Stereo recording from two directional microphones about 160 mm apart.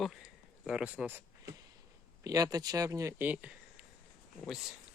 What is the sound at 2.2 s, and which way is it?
Speech, 20° right (ahead or behind).